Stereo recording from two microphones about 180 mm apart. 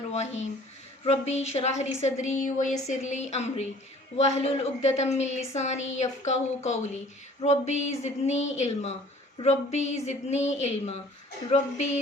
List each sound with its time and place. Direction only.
0.1 s a woman's voice: 40° left (ahead or behind)